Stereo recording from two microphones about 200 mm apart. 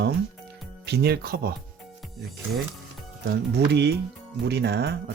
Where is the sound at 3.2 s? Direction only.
55° right (ahead or behind).